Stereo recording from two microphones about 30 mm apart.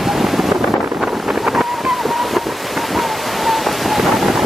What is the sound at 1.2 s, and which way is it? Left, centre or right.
Wind noise, right.